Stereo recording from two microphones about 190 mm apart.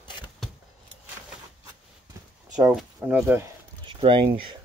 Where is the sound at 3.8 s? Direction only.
25° right (ahead or behind).